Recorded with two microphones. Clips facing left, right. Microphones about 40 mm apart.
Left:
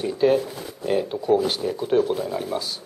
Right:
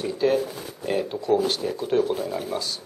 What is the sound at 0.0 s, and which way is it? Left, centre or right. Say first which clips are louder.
Speech: left 3 dB; centre.